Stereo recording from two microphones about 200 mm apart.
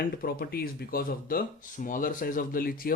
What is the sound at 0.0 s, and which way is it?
Speech, 50° left (ahead or behind).